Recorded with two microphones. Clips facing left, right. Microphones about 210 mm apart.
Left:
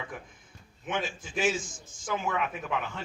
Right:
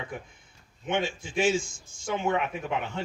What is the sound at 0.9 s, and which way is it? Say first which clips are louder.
A man's voice: right 4 dB; 25° right (ahead or behind).